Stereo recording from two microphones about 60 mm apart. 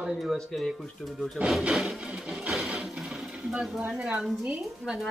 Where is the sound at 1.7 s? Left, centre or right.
Centre.